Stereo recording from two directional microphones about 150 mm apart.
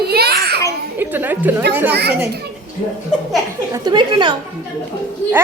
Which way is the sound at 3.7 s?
30° right (ahead or behind).